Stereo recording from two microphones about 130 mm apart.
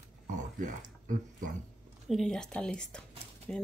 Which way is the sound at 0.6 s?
85° right.